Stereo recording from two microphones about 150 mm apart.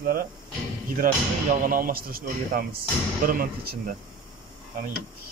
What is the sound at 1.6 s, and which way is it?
A man's voice, 70° right (ahead or behind).